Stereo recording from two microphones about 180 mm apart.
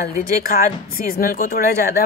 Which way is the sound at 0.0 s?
55° left (ahead or behind).